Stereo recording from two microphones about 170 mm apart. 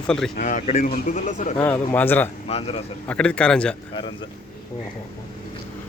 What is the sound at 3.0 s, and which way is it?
Speech, 5° left (ahead or behind).